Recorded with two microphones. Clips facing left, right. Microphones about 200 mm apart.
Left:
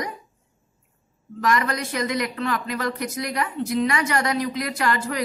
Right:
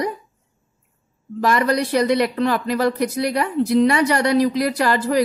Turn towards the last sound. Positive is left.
turn(degrees=-35)  # may be behind; listen again after turning